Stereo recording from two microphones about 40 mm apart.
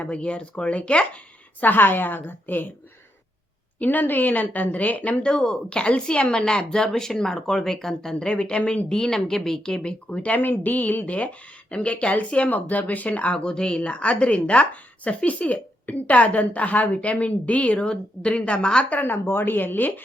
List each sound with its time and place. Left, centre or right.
0.0 s speech: left
1.6 s a woman's voice: left
3.8 s speech: left
5.2 s speech: left
8.2 s speech: left
8.9 s speech: centre
10.1 s a woman's voice: left
10.3 s a woman's voice: left
12.5 s speech: left
13.3 s a woman's voice: left
19.0 s a woman's voice: left